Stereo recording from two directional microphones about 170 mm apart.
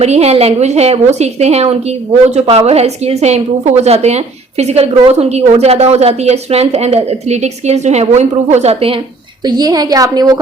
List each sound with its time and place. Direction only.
0.0 s a woman's voice: 40° right (ahead or behind)
9.4 s a woman's voice: 25° right (ahead or behind)